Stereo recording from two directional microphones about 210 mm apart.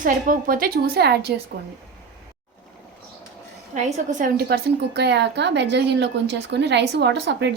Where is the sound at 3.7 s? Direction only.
35° right (ahead or behind).